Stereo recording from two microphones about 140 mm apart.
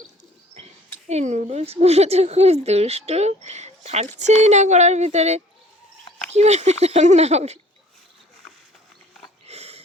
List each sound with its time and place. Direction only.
1.0 s a woman's voice: 55° right (ahead or behind)
9.5 s wheeze: 50° right (ahead or behind)